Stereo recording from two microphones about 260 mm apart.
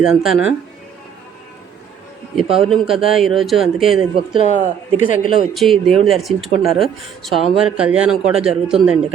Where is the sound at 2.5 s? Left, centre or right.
Centre.